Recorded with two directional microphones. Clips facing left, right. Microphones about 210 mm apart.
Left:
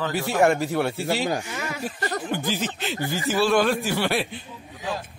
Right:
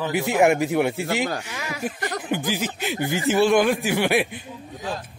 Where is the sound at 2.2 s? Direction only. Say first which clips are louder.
Right 2 dB; 15° right (ahead or behind).